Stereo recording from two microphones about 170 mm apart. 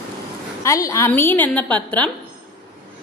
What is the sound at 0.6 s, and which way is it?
A woman's voice, 20° left (ahead or behind).